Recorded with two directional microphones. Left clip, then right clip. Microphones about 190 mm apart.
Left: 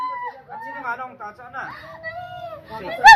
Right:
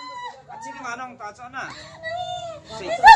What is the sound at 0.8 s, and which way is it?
Speech, 35° right (ahead or behind).